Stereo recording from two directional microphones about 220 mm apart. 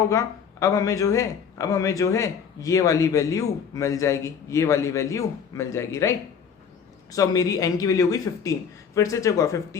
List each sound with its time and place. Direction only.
0.1 s speech: 15° left (ahead or behind)